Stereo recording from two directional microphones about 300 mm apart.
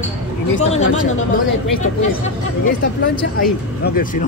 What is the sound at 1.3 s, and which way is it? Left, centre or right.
Speech, left.